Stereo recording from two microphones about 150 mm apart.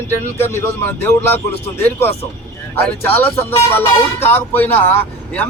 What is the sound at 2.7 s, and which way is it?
Speech, 15° left (ahead or behind).